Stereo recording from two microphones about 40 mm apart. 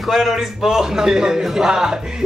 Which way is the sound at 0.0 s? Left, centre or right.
Centre.